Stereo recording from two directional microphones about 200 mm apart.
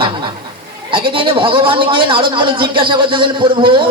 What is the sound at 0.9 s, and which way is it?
Speech, 25° right (ahead or behind).